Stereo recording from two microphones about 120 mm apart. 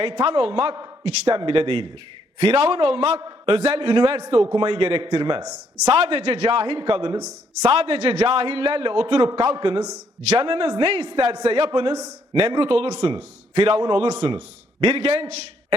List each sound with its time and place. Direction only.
0.0 s a man's voice: 50° right (ahead or behind)
3.2 s a man's voice: 45° right (ahead or behind)
5.9 s a man's voice: 55° right (ahead or behind)
7.6 s a man's voice: 55° right (ahead or behind)
11.7 s a man's voice: 40° right (ahead or behind); by 15.4 s 60° right (ahead or behind)